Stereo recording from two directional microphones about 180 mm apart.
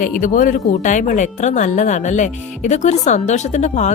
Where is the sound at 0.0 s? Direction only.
45° left (ahead or behind).